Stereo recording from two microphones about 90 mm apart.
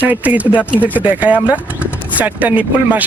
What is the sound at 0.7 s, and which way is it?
Speech, 20° left (ahead or behind).